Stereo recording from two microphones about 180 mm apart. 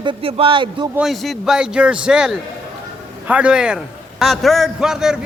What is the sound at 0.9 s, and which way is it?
A man's voice, centre (ahead or behind).